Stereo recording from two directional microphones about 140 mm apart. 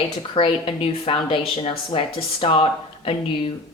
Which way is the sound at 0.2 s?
40° left (ahead or behind).